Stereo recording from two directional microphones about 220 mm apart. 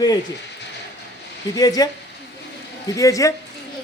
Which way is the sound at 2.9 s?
15° left (ahead or behind).